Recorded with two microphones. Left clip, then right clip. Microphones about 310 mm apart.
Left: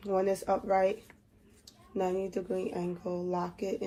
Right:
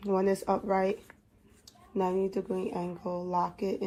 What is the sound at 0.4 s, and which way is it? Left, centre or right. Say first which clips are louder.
Speech: left 1 dB; right.